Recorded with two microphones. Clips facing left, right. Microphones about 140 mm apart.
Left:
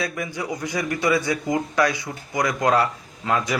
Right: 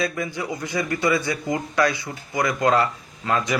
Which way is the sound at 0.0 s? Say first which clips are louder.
Right 2 dB; 15° left (ahead or behind).